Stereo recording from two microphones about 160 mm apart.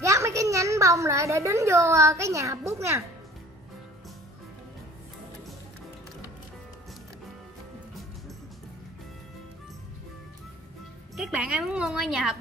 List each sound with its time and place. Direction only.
0.0 s a woman's voice: 20° right (ahead or behind)
11.1 s a woman's voice: 5° right (ahead or behind)